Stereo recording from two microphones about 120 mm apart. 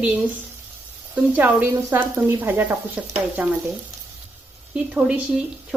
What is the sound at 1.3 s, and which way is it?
A woman's voice, 15° right (ahead or behind).